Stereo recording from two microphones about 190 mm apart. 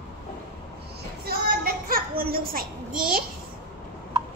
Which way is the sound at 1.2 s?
50° right (ahead or behind).